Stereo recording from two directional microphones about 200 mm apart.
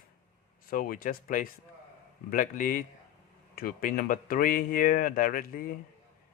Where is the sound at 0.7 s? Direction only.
45° left (ahead or behind).